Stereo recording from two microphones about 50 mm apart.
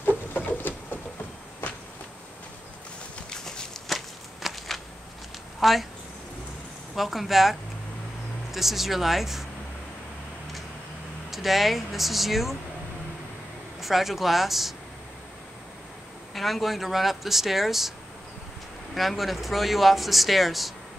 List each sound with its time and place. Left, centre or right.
0.5 s patter: left
3.3 s a sound: centre
5.6 s speech: centre
7.0 s speech: centre
11.2 s speech: centre
13.7 s speech: centre
16.3 s speech: centre
18.9 s speech: centre